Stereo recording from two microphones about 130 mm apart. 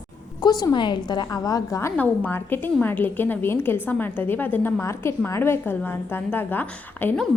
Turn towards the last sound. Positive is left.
turn(degrees=10)  # may be behind; listen again after turning